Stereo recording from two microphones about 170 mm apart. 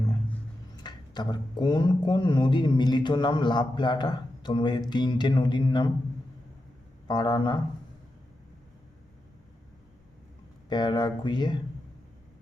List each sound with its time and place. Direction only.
0.8 s speech: 25° left (ahead or behind)
7.1 s speech: 25° left (ahead or behind)
10.7 s speech: 25° left (ahead or behind)